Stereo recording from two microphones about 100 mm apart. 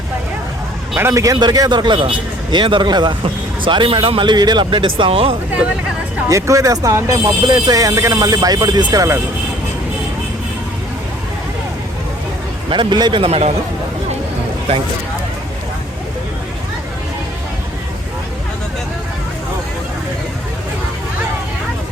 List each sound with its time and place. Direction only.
0.9 s a man's voice: 30° right (ahead or behind); by 5.4 s 70° right (ahead or behind)
6.2 s speech: 30° right (ahead or behind)
7.4 s speech: 45° right (ahead or behind)
12.7 s a man's voice: 50° right (ahead or behind)
13.2 s a man's voice: 90° right